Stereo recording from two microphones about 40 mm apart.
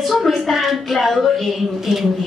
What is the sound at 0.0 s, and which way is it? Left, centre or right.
A woman's voice, centre.